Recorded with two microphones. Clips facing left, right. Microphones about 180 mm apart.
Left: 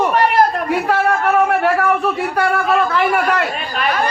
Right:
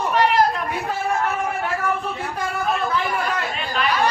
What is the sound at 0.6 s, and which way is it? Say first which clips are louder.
A man's voice: left 8 dB; 75° left (ahead or behind).